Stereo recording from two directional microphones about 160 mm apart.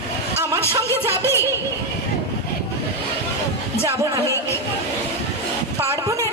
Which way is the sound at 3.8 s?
20° right (ahead or behind).